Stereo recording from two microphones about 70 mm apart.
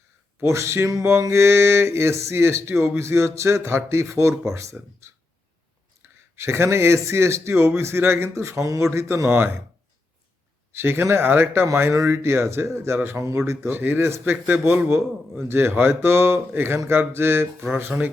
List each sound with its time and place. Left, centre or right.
0.3 s speech: right
9.3 s speech: right
10.8 s speech: right